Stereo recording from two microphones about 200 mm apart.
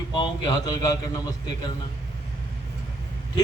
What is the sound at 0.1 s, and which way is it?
A man's voice, 20° left (ahead or behind).